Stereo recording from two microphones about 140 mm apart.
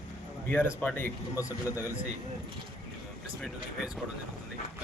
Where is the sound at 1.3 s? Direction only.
25° left (ahead or behind).